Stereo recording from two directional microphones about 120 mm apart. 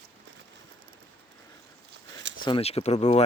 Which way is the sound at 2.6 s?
60° left (ahead or behind).